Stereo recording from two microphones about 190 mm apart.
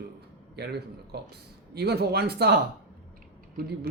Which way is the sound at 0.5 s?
60° right (ahead or behind).